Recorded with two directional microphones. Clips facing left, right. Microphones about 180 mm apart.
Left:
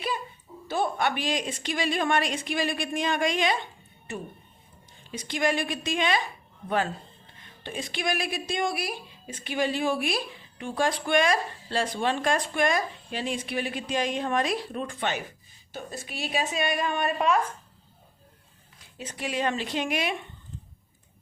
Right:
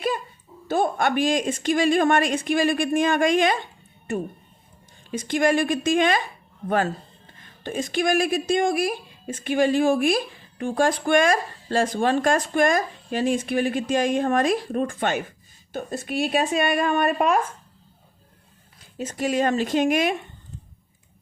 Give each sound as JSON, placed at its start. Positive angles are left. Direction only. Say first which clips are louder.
{"t": 0.7, "sound": "a woman's voice", "louder": "right 5 dB", "side_deg": -45}
{"t": 5.1, "sound": "a woman's voice", "louder": "right 6 dB", "side_deg": -50}
{"t": 18.9, "sound": "a woman's voice", "louder": "right 8 dB", "side_deg": -40}